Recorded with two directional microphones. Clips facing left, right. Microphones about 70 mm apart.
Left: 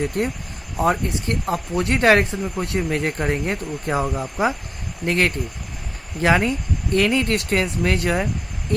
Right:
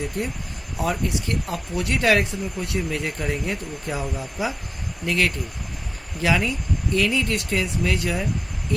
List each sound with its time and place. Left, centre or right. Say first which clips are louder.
0.2 s speech: left 4 dB; left
0.8 s speech: left 5 dB; left